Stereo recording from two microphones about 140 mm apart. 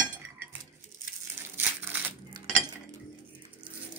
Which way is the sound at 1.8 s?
15° right (ahead or behind).